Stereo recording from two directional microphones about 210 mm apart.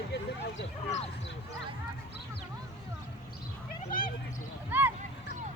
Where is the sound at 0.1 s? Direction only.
60° left (ahead or behind).